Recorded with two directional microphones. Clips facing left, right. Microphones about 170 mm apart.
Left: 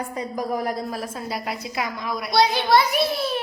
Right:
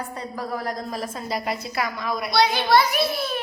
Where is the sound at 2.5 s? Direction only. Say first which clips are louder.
Even; 25° left (ahead or behind).